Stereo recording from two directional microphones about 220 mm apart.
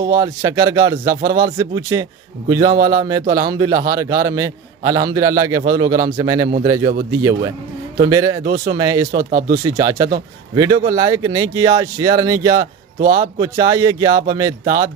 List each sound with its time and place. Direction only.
0.0 s speech: 20° right (ahead or behind)
8.0 s speech: 15° right (ahead or behind)
9.1 s speech: 40° right (ahead or behind)
9.7 s speech: 15° right (ahead or behind)
13.0 s speech: 40° right (ahead or behind)
13.4 s speech: 20° right (ahead or behind)